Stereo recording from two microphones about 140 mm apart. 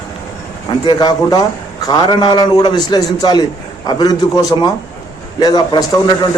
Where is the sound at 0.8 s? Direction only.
30° left (ahead or behind).